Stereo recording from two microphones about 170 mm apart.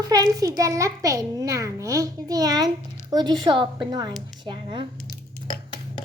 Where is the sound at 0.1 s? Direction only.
20° right (ahead or behind).